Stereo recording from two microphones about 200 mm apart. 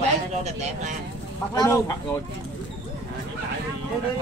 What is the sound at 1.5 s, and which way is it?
Speech, 20° left (ahead or behind).